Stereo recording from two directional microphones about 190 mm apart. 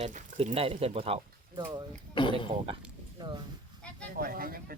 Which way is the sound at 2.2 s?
25° left (ahead or behind).